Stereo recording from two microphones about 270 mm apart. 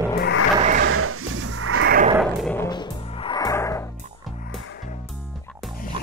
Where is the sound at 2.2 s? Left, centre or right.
Centre.